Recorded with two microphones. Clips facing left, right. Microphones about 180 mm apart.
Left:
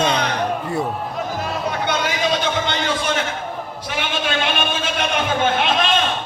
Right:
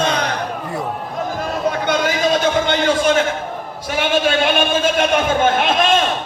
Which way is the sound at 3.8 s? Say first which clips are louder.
Right 8 dB; 45° right (ahead or behind).